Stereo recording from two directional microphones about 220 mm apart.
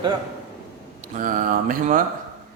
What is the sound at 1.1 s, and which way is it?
Speech, 35° right (ahead or behind).